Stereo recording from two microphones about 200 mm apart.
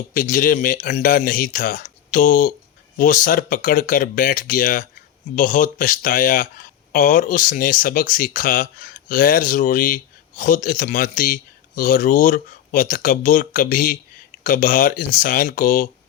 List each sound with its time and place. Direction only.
0.1 s speech: 45° left (ahead or behind)